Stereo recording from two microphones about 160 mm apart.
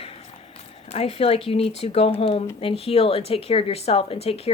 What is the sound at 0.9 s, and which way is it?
Speech, 40° left (ahead or behind).